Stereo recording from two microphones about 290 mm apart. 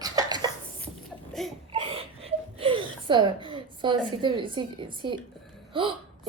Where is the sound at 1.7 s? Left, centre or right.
Centre.